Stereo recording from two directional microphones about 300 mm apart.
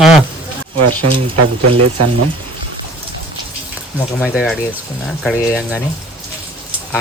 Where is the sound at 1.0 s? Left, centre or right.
Right.